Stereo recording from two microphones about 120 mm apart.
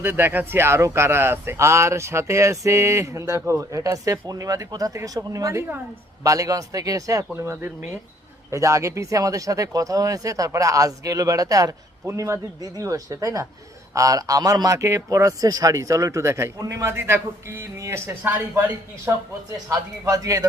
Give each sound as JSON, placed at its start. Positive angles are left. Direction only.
{"t": 0.0, "sound": "speech", "side_deg": -15}